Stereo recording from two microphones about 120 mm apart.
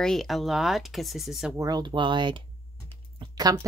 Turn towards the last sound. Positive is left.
turn(degrees=-35)  # may be behind; listen again after turning